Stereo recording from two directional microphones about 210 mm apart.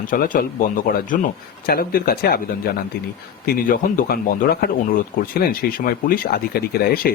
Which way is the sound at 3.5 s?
40° left (ahead or behind).